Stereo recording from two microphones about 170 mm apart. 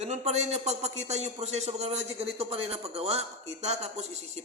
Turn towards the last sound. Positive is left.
turn(degrees=-40)  # may be behind; listen again after turning